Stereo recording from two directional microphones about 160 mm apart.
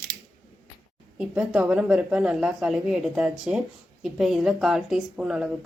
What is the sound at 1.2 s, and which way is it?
A woman's voice, 5° right (ahead or behind).